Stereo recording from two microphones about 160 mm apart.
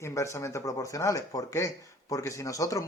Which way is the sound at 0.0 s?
20° left (ahead or behind).